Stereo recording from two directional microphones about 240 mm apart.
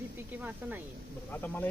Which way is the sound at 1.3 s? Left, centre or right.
Centre.